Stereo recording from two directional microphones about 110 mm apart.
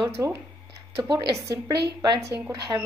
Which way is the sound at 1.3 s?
30° right (ahead or behind).